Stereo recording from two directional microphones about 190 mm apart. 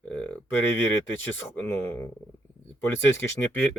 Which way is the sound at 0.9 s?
10° left (ahead or behind).